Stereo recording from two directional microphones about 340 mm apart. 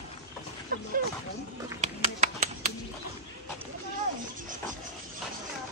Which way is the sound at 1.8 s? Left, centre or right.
Right.